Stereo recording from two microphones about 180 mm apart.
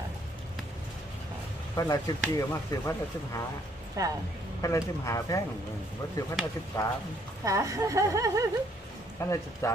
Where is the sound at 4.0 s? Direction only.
20° right (ahead or behind).